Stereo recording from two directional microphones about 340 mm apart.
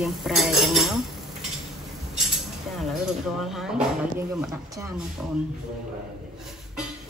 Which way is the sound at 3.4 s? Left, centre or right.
Centre.